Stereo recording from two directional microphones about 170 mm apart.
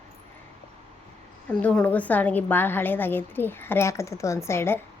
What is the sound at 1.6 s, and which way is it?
Speech, 5° left (ahead or behind).